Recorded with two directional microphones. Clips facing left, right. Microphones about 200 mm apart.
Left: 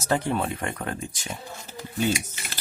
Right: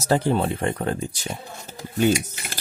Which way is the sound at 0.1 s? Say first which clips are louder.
Right 4 dB; 30° right (ahead or behind).